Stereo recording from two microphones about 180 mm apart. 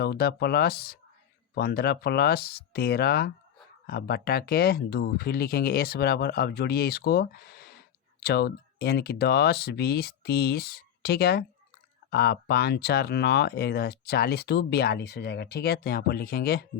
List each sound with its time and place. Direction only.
0.0 s speech: 60° left (ahead or behind)